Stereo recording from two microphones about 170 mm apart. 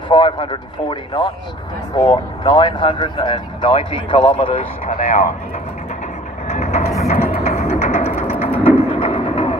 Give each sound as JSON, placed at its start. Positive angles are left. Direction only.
{"t": 0.1, "sound": "speech", "side_deg": 30}
{"t": 4.9, "sound": "a man's voice", "side_deg": 45}
{"t": 6.5, "sound": "train", "side_deg": 40}
{"t": 7.0, "sound": "a sound", "side_deg": 40}